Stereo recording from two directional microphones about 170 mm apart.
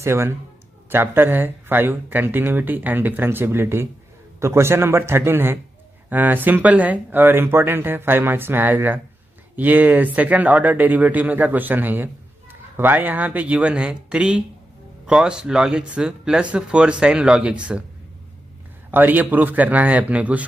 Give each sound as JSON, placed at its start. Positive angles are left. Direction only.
{"t": 0.0, "sound": "speech", "side_deg": -15}
{"t": 18.9, "sound": "speech", "side_deg": -10}